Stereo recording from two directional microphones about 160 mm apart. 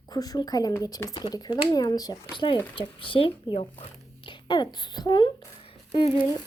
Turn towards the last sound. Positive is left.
turn(degrees=30)  # may be behind; listen again after turning